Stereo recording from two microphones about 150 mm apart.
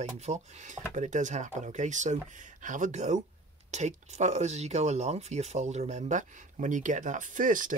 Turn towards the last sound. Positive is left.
turn(degrees=-65)  # may be behind; listen again after turning